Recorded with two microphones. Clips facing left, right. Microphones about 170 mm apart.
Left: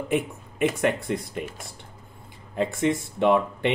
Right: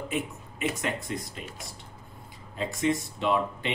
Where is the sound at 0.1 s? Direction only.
60° left (ahead or behind).